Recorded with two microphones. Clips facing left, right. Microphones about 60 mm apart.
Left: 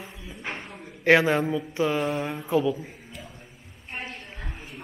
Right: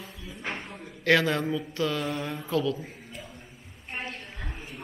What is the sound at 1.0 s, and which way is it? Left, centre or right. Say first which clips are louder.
Speech: left 4 dB; left.